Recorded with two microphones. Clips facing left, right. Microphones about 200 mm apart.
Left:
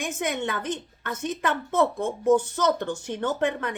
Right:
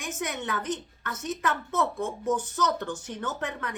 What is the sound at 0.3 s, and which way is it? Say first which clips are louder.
A woman's voice: left 3 dB; 30° left (ahead or behind).